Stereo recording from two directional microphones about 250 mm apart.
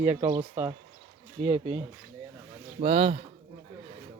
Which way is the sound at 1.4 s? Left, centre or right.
Right.